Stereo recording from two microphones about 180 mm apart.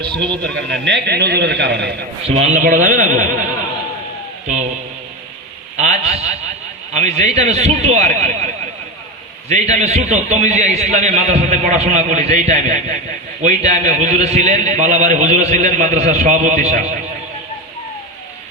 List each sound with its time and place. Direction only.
0.5 s a man's voice: 75° right (ahead or behind)
2.2 s speech: 35° right (ahead or behind)
5.7 s a man's voice: 40° right (ahead or behind)
9.5 s a man's voice: 40° right (ahead or behind)